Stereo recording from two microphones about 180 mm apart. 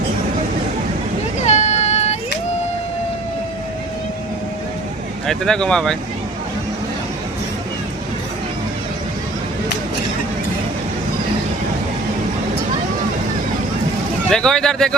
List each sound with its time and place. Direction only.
1.4 s a sound: 40° left (ahead or behind)
5.2 s speech: 5° left (ahead or behind)
14.3 s speech: 5° left (ahead or behind)